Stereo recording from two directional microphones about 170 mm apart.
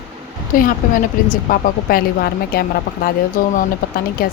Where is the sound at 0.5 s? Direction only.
55° left (ahead or behind).